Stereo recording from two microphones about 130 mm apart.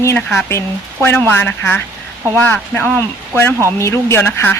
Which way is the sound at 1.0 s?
15° left (ahead or behind).